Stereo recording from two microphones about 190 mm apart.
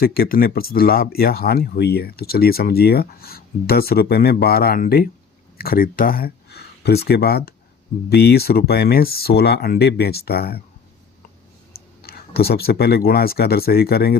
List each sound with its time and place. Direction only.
0.0 s speech: 50° left (ahead or behind)
12.0 s speech: 55° left (ahead or behind)